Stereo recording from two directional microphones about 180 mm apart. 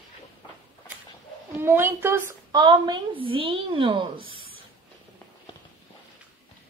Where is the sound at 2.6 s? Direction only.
25° right (ahead or behind).